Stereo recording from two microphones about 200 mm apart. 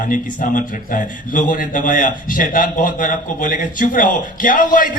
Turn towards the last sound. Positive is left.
turn(degrees=40)  # may be behind; listen again after turning